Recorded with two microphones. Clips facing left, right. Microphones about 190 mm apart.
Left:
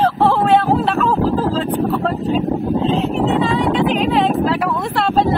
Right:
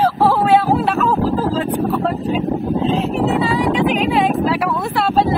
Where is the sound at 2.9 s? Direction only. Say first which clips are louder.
Left 1 dB; 5° right (ahead or behind).